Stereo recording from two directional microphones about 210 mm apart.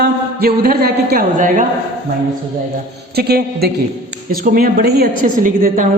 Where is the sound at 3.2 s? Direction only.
50° right (ahead or behind).